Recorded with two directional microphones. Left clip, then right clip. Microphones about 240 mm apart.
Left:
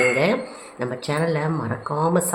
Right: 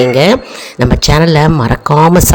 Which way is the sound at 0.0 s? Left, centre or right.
Right.